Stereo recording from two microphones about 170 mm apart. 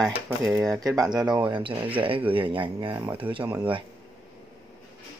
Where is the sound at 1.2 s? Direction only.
25° right (ahead or behind).